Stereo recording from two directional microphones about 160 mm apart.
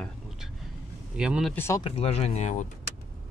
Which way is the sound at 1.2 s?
5° right (ahead or behind).